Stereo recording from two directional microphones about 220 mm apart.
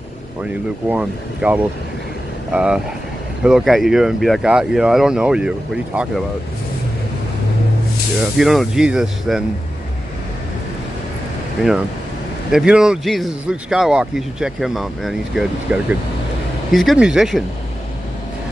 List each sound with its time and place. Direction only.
0.4 s speech: 5° right (ahead or behind)
8.2 s speech: centre (ahead or behind)
11.6 s speech: centre (ahead or behind)